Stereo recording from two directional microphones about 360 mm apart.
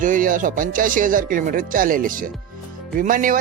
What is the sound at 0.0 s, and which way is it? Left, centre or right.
Music, right.